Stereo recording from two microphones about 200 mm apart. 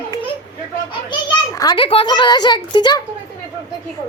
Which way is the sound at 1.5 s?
20° left (ahead or behind).